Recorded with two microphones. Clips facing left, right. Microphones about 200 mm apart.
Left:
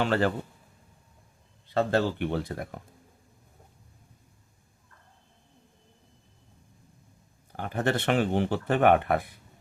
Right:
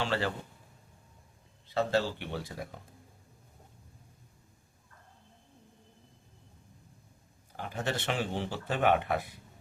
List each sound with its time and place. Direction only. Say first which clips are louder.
0.0 s a man's voice: left 6 dB; 50° left (ahead or behind)
1.7 s speech: left 4 dB; 55° left (ahead or behind)
7.5 s speech: left 7 dB; 60° left (ahead or behind)